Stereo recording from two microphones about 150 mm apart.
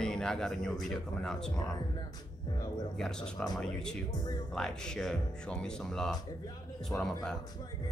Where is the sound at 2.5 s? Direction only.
25° left (ahead or behind).